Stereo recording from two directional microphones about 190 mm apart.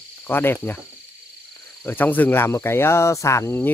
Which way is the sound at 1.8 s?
10° left (ahead or behind).